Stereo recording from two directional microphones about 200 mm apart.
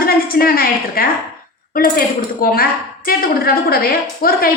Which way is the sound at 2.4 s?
45° left (ahead or behind).